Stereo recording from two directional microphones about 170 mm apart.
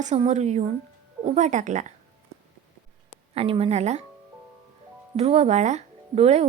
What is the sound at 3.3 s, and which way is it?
Speech, 35° right (ahead or behind).